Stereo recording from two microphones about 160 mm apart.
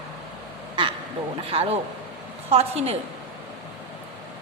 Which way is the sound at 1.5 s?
40° right (ahead or behind).